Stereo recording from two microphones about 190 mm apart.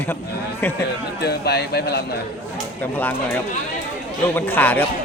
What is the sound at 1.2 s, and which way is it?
Speech, 60° left (ahead or behind).